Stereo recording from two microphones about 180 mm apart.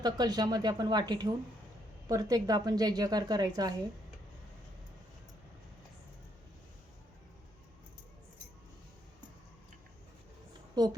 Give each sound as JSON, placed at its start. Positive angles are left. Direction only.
{"t": 0.0, "sound": "a woman's voice", "side_deg": -20}